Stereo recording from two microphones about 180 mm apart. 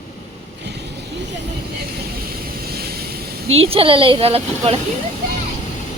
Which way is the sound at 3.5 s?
35° right (ahead or behind).